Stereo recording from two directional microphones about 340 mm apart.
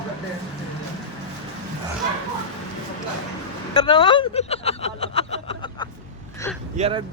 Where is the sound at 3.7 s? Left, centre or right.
Centre.